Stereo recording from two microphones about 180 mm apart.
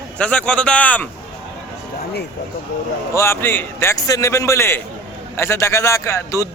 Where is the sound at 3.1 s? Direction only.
15° left (ahead or behind).